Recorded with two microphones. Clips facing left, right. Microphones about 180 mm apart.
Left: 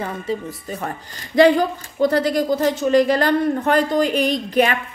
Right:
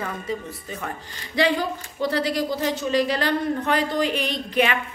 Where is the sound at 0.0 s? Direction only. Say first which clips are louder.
Left 4 dB; 35° left (ahead or behind).